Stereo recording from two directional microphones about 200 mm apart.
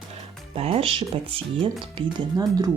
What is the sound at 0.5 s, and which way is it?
Speech, 30° right (ahead or behind).